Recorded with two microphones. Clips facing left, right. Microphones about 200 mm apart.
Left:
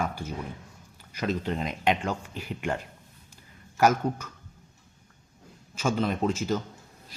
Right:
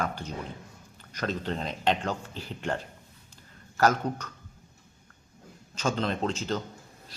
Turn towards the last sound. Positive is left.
turn(degrees=10)  # may be behind; listen again after turning